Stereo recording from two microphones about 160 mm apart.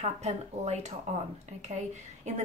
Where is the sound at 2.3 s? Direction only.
45° right (ahead or behind).